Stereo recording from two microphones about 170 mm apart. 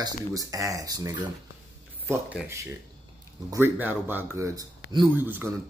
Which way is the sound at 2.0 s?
10° right (ahead or behind).